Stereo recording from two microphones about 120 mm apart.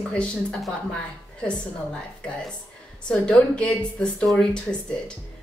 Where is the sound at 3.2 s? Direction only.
10° left (ahead or behind).